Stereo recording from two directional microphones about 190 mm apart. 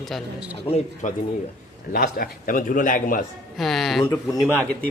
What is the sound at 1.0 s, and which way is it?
A man's voice, 40° left (ahead or behind).